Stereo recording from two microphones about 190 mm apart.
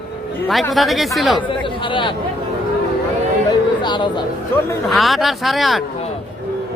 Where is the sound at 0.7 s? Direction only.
Centre (ahead or behind).